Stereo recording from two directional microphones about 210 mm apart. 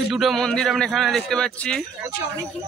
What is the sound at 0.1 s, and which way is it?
A man's voice, centre (ahead or behind).